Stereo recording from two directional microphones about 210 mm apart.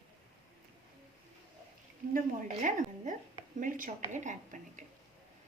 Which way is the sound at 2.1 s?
35° right (ahead or behind).